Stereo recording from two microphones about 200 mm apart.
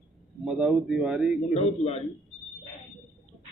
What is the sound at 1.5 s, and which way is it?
Speech, 30° left (ahead or behind).